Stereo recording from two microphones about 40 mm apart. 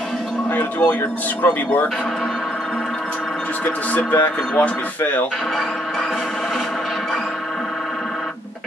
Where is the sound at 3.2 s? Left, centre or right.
Centre.